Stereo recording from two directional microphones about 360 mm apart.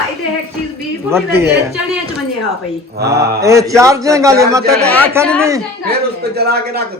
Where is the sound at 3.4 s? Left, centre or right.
Centre.